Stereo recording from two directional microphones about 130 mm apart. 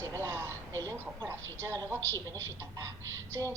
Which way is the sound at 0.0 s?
20° right (ahead or behind).